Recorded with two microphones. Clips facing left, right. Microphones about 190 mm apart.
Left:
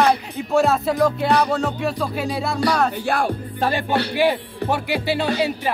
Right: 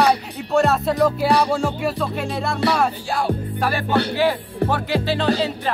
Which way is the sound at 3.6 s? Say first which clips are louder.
Even; 20° left (ahead or behind).